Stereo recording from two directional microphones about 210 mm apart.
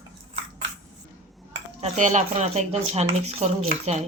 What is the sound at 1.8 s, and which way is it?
Speech, 35° right (ahead or behind).